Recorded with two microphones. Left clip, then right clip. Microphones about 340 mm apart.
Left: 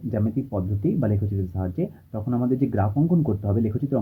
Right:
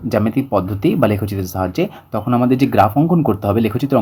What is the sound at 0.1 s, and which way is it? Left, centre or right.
Speech, centre.